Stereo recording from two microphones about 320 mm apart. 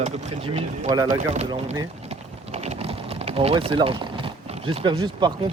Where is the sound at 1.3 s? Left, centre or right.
Centre.